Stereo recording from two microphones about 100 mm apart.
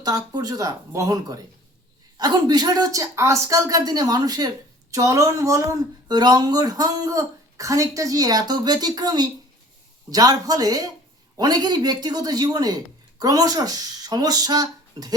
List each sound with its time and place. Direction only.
0.0 s speech: 40° right (ahead or behind)